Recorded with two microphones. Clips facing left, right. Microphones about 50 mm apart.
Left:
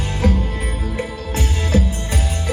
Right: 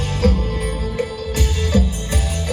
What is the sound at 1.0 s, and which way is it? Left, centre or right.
Music, left.